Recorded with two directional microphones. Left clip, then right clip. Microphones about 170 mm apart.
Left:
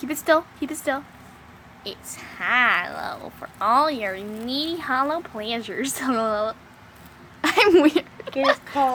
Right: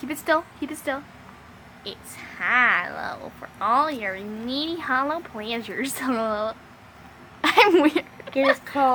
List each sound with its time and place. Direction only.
0.0 s a woman's voice: 20° left (ahead or behind)
3.6 s a woman's voice: 25° left (ahead or behind)
4.4 s speech: 5° left (ahead or behind)
7.4 s a sound: centre (ahead or behind)
7.9 s a woman's voice: 15° left (ahead or behind)